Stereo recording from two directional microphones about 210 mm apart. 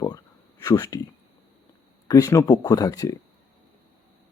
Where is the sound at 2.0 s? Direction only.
15° left (ahead or behind).